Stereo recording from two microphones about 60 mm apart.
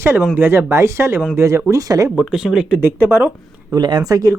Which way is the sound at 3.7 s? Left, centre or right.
Right.